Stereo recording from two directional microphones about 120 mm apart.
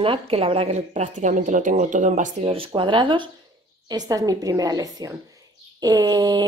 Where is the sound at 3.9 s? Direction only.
30° right (ahead or behind).